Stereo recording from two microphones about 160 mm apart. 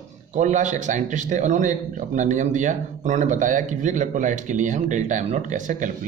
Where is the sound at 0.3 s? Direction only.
50° right (ahead or behind).